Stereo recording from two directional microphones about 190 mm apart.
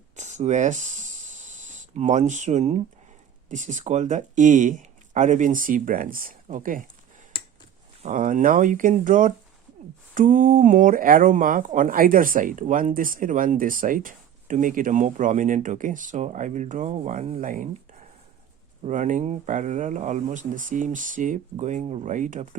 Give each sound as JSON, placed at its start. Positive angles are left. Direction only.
{"t": 0.2, "sound": "a sound", "side_deg": -40}
{"t": 3.5, "sound": "speech", "side_deg": -40}
{"t": 8.0, "sound": "speech", "side_deg": -45}
{"t": 18.9, "sound": "speech", "side_deg": -40}